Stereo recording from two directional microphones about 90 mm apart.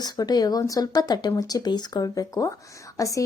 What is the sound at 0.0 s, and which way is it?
A woman's voice, 45° left (ahead or behind).